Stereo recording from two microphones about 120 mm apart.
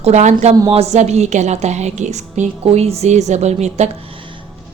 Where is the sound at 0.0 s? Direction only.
75° right (ahead or behind).